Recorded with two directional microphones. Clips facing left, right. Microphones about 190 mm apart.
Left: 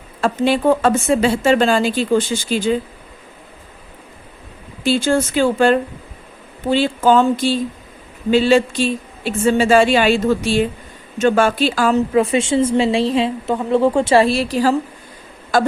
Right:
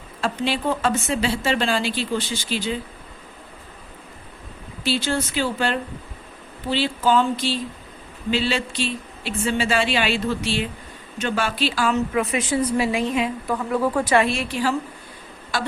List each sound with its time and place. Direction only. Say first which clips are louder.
0.2 s a woman's voice: left 8 dB; 50° left (ahead or behind)
4.8 s a woman's voice: left 7 dB; 50° left (ahead or behind)